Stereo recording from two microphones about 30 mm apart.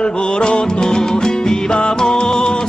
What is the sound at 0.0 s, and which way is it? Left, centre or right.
Music, left.